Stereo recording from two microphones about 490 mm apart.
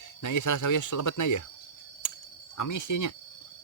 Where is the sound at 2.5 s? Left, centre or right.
Left.